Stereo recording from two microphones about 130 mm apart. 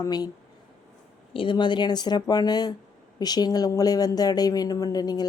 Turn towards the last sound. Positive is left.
turn(degrees=30)  # may be behind; listen again after turning